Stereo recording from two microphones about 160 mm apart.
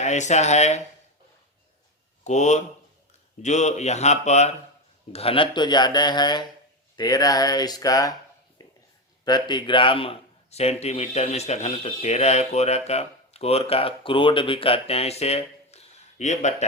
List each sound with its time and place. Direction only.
0.0 s speech: 45° left (ahead or behind)
2.2 s speech: 45° left (ahead or behind); by 8.1 s 20° left (ahead or behind)
8.6 s a sound: 25° left (ahead or behind)
9.2 s a man's voice: 25° left (ahead or behind); by 16.6 s 45° left (ahead or behind)